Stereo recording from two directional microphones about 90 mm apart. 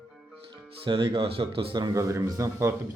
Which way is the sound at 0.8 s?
70° right (ahead or behind).